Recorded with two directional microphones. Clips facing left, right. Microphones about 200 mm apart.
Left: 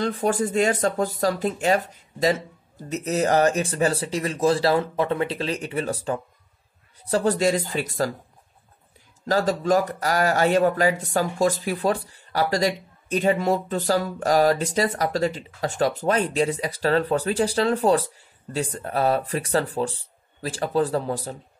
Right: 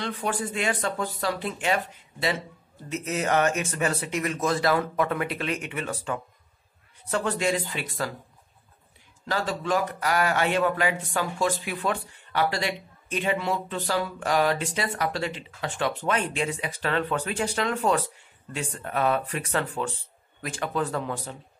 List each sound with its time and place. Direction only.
0.0 s speech: 40° left (ahead or behind)
9.2 s speech: 40° left (ahead or behind)